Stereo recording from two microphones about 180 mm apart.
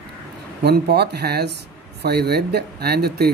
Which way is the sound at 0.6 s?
65° right (ahead or behind).